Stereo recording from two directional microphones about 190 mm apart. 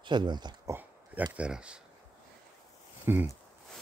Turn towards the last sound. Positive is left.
turn(degrees=-10)  # may be behind; listen again after turning